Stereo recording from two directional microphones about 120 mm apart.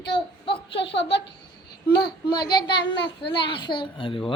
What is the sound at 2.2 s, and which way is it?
A child's voice, 40° left (ahead or behind).